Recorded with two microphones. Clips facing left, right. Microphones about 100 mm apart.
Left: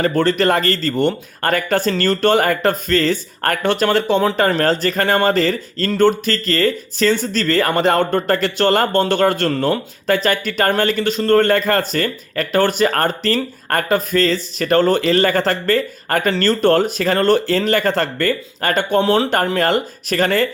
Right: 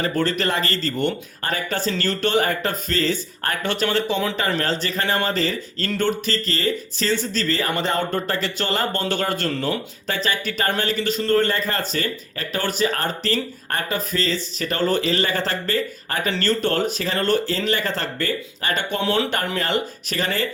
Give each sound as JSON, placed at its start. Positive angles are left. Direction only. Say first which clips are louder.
{"t": 0.0, "sound": "speech", "louder": "left 6 dB", "side_deg": 50}